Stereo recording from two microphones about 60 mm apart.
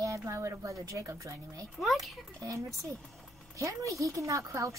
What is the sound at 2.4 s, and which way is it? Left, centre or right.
A woman's voice, right.